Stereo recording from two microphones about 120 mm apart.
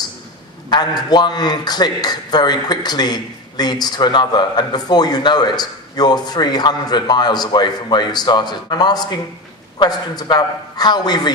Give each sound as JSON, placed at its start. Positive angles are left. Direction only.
{"t": 0.7, "sound": "a man's voice", "side_deg": 35}